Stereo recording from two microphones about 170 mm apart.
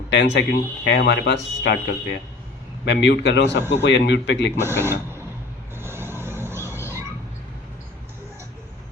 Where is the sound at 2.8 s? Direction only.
90° left.